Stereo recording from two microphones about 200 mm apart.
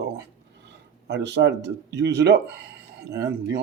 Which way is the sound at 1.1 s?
60° right (ahead or behind).